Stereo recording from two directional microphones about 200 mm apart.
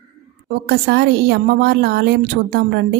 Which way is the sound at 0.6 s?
55° right (ahead or behind).